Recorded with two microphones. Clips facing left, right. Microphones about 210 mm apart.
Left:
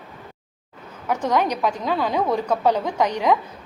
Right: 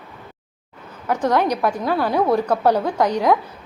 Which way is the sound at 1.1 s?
10° left (ahead or behind).